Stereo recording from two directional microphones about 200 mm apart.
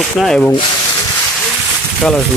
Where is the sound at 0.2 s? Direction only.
5° left (ahead or behind).